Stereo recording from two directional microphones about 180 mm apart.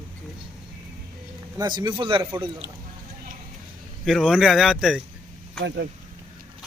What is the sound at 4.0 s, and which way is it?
Speech, centre (ahead or behind).